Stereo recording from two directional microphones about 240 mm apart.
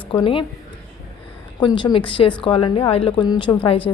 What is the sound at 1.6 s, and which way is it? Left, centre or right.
A woman's voice, centre.